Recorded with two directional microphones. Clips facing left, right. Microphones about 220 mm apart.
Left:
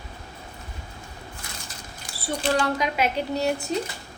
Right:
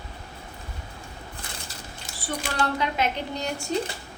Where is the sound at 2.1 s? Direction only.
25° right (ahead or behind).